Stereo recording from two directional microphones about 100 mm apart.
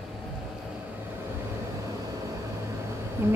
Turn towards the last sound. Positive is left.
turn(degrees=-25)  # may be behind; listen again after turning